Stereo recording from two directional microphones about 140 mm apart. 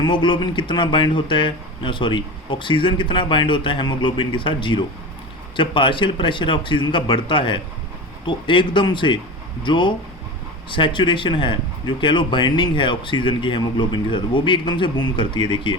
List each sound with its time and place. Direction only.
0.0 s speech: 35° left (ahead or behind)